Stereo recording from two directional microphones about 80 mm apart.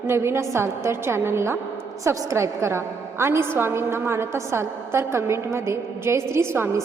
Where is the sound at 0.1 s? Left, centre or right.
Right.